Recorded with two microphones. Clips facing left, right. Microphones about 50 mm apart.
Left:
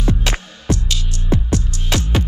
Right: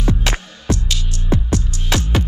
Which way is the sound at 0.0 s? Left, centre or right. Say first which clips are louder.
Even; right.